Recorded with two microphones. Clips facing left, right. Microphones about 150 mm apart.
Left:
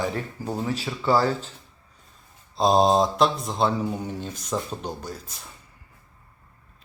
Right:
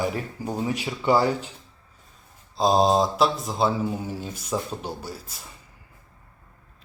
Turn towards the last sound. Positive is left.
turn(degrees=-5)  # may be behind; listen again after turning